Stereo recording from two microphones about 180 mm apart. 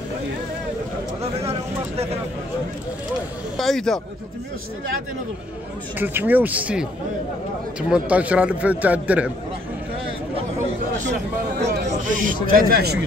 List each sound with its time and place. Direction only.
3.5 s speech: centre (ahead or behind)
5.9 s a man's voice: 10° right (ahead or behind)
7.9 s a man's voice: 5° right (ahead or behind)
11.7 s speech: 50° right (ahead or behind)